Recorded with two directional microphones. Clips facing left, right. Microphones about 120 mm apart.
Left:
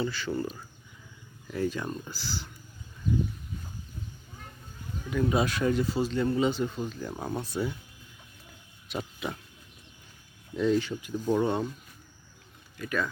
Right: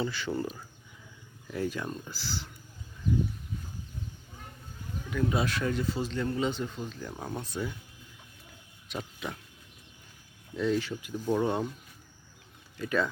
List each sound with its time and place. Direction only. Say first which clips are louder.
0.0 s speech: left 1 dB; 20° right (ahead or behind)
1.5 s speech: left 2 dB; 5° right (ahead or behind)
5.1 s speech: left 3 dB; 15° left (ahead or behind)
8.9 s pig: left 3 dB; 10° left (ahead or behind)
10.5 s speech: left 3 dB; 5° left (ahead or behind)
11.4 s speech: left 1 dB; 10° right (ahead or behind)
12.7 s speech: right 2 dB; 25° right (ahead or behind)